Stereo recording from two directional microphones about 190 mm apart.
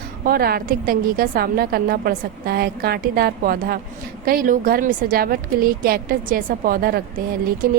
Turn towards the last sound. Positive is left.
turn(degrees=-50)  # may be behind; listen again after turning